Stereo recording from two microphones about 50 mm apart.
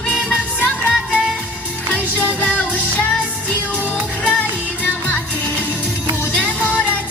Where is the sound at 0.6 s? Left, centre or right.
Left.